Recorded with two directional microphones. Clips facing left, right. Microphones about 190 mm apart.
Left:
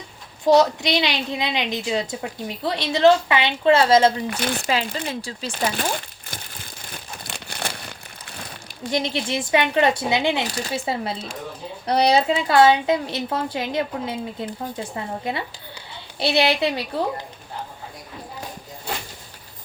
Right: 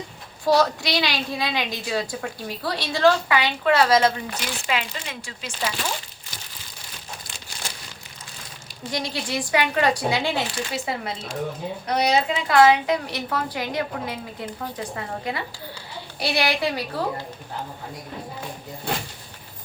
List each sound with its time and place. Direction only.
0.4 s a woman's voice: 20° left (ahead or behind)
4.4 s speech: 55° left (ahead or behind)
4.9 s speech: 35° left (ahead or behind)
5.5 s crumpling: 50° left (ahead or behind)
8.9 s a woman's voice: 25° left (ahead or behind)